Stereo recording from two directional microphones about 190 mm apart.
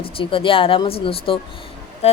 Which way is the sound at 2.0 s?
35° left (ahead or behind).